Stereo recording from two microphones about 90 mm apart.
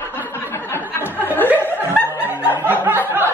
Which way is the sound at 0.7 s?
25° left (ahead or behind).